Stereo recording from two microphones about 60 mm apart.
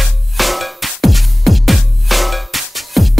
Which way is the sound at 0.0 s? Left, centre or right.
Centre.